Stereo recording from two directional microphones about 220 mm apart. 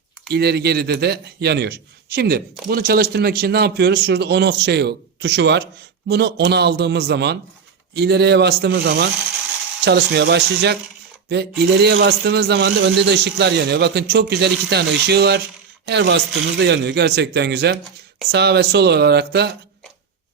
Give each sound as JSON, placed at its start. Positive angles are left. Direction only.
{"t": 0.3, "sound": "a man's voice", "side_deg": -45}